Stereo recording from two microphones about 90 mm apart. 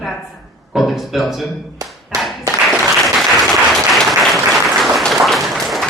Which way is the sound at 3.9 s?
Centre (ahead or behind).